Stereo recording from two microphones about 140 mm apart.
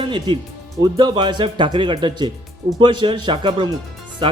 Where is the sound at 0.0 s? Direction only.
35° right (ahead or behind).